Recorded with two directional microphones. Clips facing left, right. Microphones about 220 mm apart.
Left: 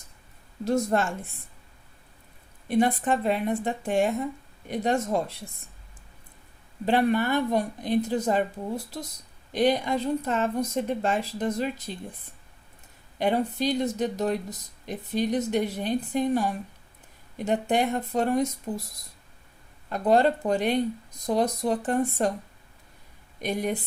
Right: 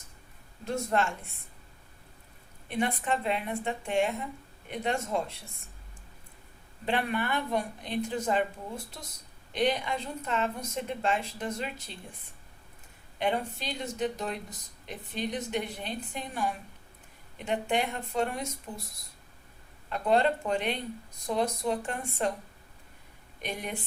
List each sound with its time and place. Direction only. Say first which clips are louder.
0.6 s speech: left 5 dB; 40° left (ahead or behind)
2.7 s speech: left 7 dB; 40° left (ahead or behind)
6.8 s speech: left 7 dB; 35° left (ahead or behind)
13.1 s speech: left 6 dB; 40° left (ahead or behind)
19.9 s speech: left 4 dB; 40° left (ahead or behind)
23.4 s speech: left 9 dB; 40° left (ahead or behind)